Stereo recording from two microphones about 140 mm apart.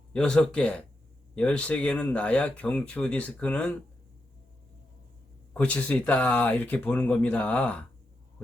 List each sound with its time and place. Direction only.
0.1 s speech: 5° left (ahead or behind)
5.5 s speech: 10° left (ahead or behind)